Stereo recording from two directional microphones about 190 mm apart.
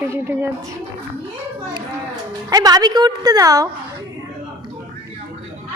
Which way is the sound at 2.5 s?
20° right (ahead or behind).